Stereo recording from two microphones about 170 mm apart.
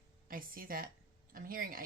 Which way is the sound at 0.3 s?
55° right (ahead or behind).